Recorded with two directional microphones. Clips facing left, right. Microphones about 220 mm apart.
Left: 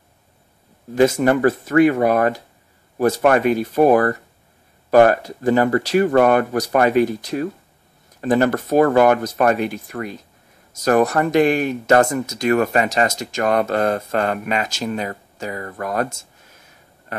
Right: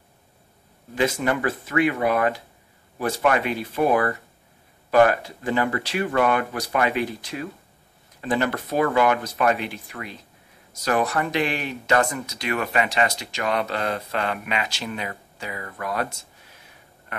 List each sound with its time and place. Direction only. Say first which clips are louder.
0.9 s speech: left 8 dB; 40° left (ahead or behind)